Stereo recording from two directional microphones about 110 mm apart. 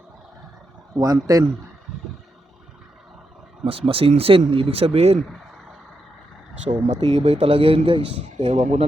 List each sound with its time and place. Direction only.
0.9 s a man's voice: 35° right (ahead or behind)
3.6 s speech: 55° right (ahead or behind)
6.7 s speech: 90° right; by 8.4 s 50° right (ahead or behind)
8.4 s speech: 90° right